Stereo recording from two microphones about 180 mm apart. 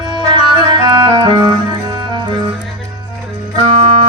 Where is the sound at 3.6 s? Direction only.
30° right (ahead or behind).